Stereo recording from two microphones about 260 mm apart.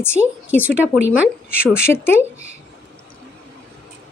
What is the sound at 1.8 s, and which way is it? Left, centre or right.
Speech, centre.